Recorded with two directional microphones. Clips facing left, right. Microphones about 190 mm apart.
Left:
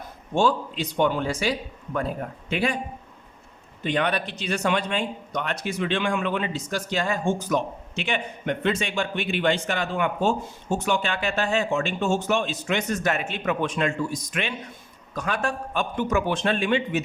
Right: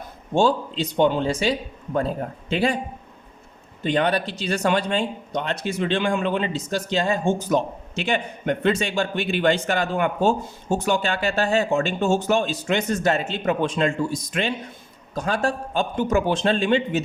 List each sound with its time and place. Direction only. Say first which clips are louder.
0.3 s speech: right 3 dB; 25° right (ahead or behind)
3.8 s speech: right 3 dB; 35° right (ahead or behind)